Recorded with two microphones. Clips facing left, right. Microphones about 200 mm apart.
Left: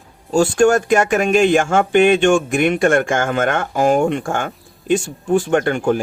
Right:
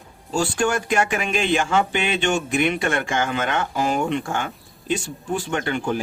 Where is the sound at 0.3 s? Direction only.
45° left (ahead or behind).